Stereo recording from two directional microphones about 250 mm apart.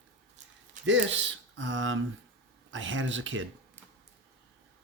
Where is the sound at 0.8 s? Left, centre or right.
Right.